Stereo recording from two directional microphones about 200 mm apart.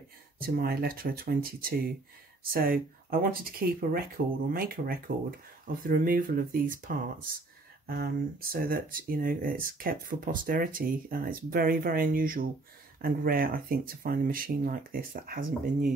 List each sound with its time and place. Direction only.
0.4 s speech: 50° right (ahead or behind)